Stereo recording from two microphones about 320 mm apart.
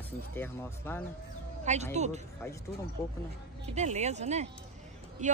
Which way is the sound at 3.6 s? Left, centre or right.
Right.